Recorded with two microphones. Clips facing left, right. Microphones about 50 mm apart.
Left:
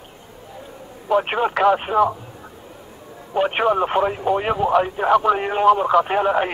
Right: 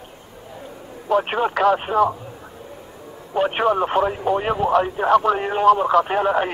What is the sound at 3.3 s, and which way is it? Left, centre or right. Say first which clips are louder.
Speech: even; centre.